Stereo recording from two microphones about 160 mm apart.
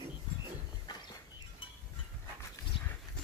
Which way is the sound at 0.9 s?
25° left (ahead or behind).